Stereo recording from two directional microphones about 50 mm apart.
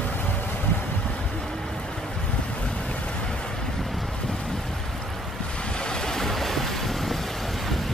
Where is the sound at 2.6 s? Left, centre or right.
Left.